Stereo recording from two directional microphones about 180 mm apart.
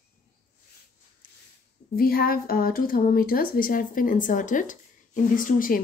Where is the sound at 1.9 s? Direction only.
55° left (ahead or behind).